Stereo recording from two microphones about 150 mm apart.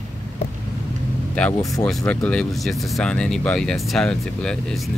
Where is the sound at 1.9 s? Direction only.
5° left (ahead or behind).